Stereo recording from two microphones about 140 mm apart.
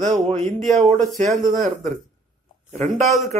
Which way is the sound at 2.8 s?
Centre (ahead or behind).